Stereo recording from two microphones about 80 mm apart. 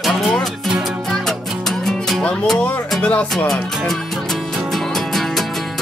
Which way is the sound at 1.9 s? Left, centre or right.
Centre.